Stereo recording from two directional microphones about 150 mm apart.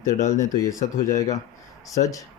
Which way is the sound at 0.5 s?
20° left (ahead or behind).